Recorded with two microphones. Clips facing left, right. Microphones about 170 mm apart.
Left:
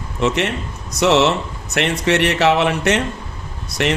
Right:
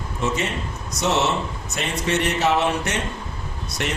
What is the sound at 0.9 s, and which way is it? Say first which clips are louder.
Speech: left 7 dB; 90° left.